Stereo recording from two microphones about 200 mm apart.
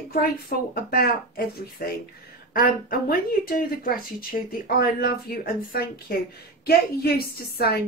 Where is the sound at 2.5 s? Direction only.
45° left (ahead or behind).